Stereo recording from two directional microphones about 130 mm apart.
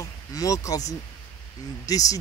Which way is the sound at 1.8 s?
25° left (ahead or behind).